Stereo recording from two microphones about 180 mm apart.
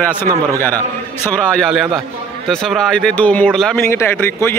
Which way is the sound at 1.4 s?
5° left (ahead or behind).